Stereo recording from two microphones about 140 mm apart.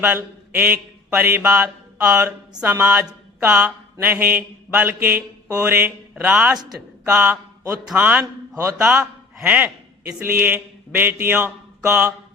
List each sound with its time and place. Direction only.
0.0 s mantra: 15° right (ahead or behind)
8.2 s a man's voice: 20° right (ahead or behind)